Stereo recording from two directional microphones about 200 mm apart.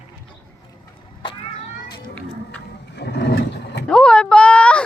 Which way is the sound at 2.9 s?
60° left (ahead or behind).